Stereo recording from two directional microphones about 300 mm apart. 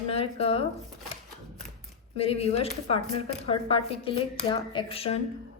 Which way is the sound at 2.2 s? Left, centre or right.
Centre.